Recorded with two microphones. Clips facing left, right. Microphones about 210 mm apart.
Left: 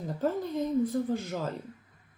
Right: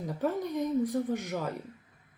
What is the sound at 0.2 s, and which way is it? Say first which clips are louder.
Speech: left 1 dB; 15° right (ahead or behind).